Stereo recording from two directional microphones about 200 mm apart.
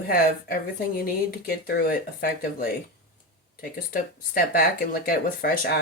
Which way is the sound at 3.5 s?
45° left (ahead or behind).